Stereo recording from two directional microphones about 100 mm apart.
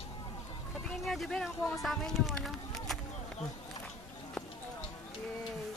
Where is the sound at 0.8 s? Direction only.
Centre (ahead or behind).